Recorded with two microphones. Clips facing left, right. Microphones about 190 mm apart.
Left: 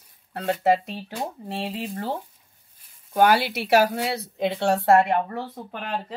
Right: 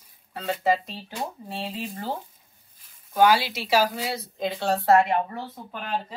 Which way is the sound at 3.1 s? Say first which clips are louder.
Left 1 dB; 55° left (ahead or behind).